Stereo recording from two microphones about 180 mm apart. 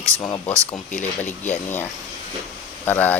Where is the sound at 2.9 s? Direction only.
10° left (ahead or behind).